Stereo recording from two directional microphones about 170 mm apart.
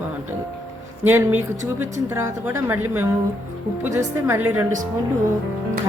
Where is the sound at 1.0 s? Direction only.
10° right (ahead or behind).